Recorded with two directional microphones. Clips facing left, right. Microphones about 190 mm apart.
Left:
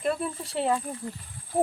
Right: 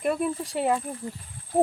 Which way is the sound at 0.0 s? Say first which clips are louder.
Right 3 dB; 15° right (ahead or behind).